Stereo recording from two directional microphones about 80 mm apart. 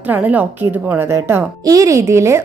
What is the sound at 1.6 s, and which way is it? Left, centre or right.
Speech, right.